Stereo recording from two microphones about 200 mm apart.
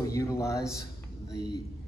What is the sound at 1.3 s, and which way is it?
Speech, 55° left (ahead or behind).